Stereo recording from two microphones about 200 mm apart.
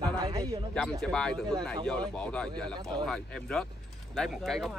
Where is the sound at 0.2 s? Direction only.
25° right (ahead or behind).